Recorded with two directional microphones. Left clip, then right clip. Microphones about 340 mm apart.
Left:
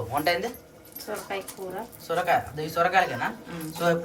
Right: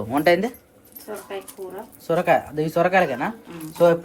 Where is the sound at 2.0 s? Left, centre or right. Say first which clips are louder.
Right 5 dB; right.